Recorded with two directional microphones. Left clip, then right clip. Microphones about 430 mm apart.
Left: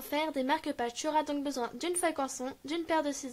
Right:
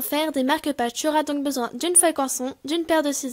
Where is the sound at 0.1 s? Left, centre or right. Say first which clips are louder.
Right 8 dB; centre.